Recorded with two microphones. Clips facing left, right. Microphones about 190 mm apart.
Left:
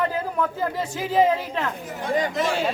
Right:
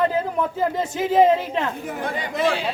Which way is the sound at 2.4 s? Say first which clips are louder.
Right 2 dB; 45° left (ahead or behind).